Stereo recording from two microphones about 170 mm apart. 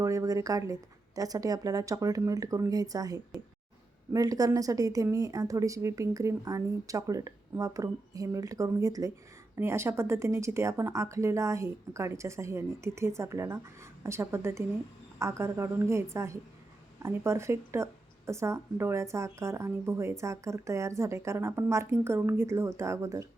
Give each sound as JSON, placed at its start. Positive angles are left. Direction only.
{"t": 0.0, "sound": "a woman's voice", "side_deg": -20}